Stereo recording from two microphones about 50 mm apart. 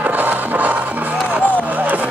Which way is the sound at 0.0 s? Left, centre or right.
Right.